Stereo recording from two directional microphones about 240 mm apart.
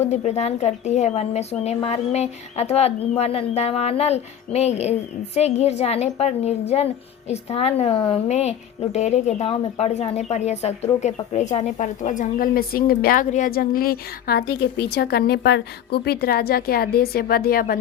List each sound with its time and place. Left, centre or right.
0.0 s a woman's voice: left